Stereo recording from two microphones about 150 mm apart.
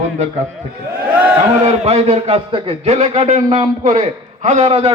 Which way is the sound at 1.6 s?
45° right (ahead or behind).